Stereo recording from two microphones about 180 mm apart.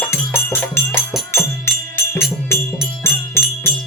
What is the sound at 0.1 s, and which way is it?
Music, 15° left (ahead or behind).